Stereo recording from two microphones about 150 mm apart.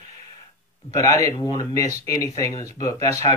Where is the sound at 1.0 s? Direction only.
20° left (ahead or behind).